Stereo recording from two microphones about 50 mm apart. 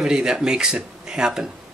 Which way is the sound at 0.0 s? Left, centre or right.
Centre.